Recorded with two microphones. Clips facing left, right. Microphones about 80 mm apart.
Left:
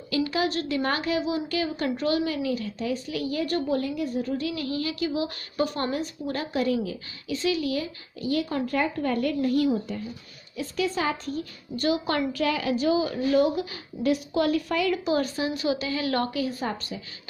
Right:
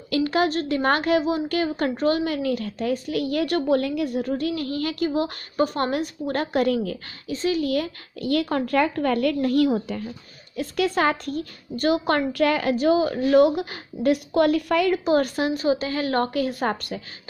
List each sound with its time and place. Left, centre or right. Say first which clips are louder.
0.1 s a woman's voice: right 4 dB; right
5.9 s a woman's voice: right 4 dB; right
7.2 s speech: right 3 dB; right
10.5 s a woman's voice: right 4 dB; right
15.6 s a woman's voice: right 4 dB; right
16.4 s a woman's voice: right 5 dB; right